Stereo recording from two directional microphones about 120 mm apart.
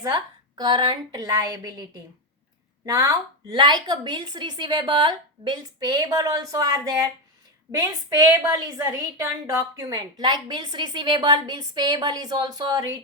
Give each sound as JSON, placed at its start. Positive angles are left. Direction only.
{"t": 0.0, "sound": "a woman's voice", "side_deg": -30}
{"t": 2.8, "sound": "a woman's voice", "side_deg": -30}
{"t": 9.9, "sound": "a woman's voice", "side_deg": -35}